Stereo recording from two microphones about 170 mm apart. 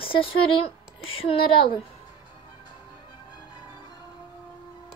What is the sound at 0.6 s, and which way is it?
Speech, 35° left (ahead or behind).